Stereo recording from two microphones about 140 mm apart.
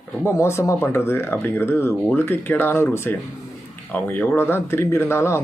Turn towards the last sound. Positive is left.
turn(degrees=20)  # may be behind; listen again after turning